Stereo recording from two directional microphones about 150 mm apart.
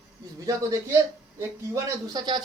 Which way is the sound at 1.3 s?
25° right (ahead or behind).